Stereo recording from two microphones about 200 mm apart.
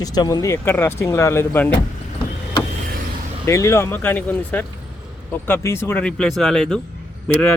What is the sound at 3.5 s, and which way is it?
Speech, 15° left (ahead or behind).